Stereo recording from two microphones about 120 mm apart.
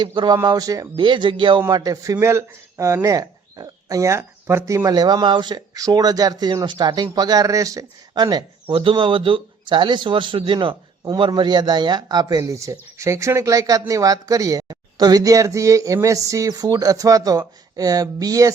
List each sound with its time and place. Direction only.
0.0 s speech: 40° right (ahead or behind)
0.9 s speech: 40° right (ahead or behind)
1.7 s speech: 30° right (ahead or behind)